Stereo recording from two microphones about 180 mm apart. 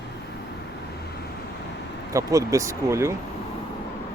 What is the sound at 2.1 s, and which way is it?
Speech, 15° right (ahead or behind).